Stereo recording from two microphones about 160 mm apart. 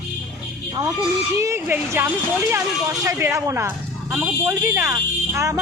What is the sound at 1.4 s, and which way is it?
Speech, 15° right (ahead or behind).